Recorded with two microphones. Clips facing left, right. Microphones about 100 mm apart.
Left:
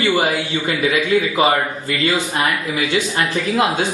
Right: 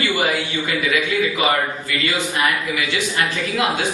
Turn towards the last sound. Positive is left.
turn(degrees=30)  # may be behind; listen again after turning